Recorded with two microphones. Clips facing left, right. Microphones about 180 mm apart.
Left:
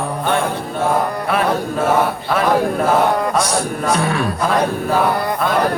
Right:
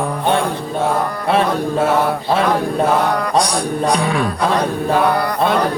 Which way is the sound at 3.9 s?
15° right (ahead or behind).